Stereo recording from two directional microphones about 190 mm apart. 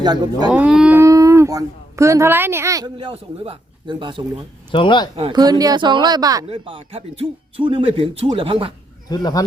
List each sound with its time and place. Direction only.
0.0 s speech: 20° right (ahead or behind)
0.5 s speech: 5° right (ahead or behind); by 4.2 s 25° right (ahead or behind)
4.7 s speech: 25° left (ahead or behind)
5.1 s speech: 25° right (ahead or behind)
9.0 s speech: 20° left (ahead or behind)